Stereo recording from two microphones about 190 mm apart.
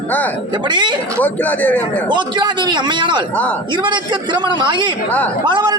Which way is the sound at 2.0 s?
25° right (ahead or behind).